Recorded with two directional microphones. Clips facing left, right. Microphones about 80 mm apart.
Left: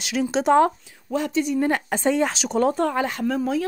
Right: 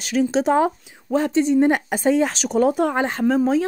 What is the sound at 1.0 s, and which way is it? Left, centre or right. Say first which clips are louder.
Speech: right 5 dB; right.